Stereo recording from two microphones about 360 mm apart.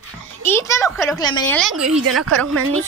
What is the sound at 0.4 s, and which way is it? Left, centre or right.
Speech, centre.